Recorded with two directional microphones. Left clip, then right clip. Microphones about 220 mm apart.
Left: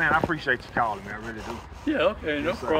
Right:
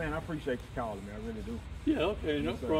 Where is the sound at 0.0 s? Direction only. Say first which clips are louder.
Left 13 dB; 40° left (ahead or behind).